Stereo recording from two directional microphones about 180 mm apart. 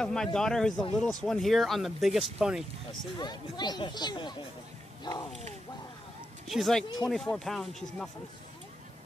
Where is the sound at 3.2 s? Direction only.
25° left (ahead or behind).